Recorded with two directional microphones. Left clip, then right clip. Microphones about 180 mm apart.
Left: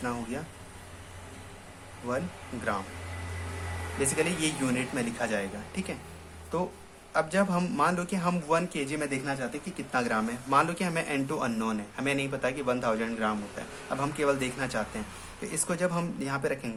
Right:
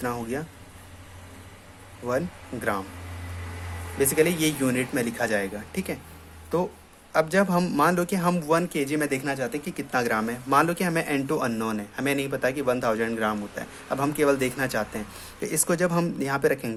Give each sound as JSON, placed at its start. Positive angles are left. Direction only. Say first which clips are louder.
{"t": 0.0, "sound": "a man's voice", "louder": "right 5 dB", "side_deg": -40}
{"t": 4.0, "sound": "a man's voice", "louder": "right 7 dB", "side_deg": -40}